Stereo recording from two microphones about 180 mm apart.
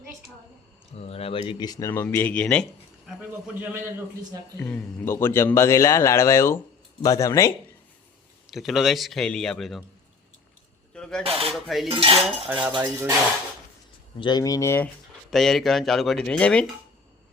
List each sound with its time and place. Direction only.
0.9 s speech: 35° left (ahead or behind); by 2.6 s 5° left (ahead or behind)
3.2 s a man's voice: 10° right (ahead or behind)
4.6 s a man's voice: 10° left (ahead or behind)
8.4 s speech: centre (ahead or behind)
10.9 s a sound: 5° left (ahead or behind)
11.2 s cutlery: 30° right (ahead or behind)
11.4 s speech: centre (ahead or behind)
11.9 s cutlery: 30° right (ahead or behind)
12.5 s a man's voice: 10° right (ahead or behind)
14.2 s speech: 25° left (ahead or behind)
15.3 s speech: centre (ahead or behind)